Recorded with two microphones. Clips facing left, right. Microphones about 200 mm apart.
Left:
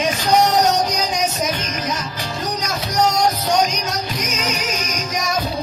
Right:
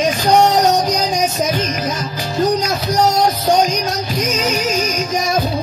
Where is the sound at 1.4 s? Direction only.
30° right (ahead or behind).